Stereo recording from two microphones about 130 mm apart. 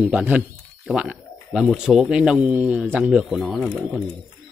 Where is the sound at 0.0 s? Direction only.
10° right (ahead or behind).